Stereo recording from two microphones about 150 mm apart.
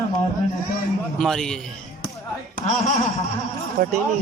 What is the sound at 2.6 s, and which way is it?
Speech, 55° left (ahead or behind).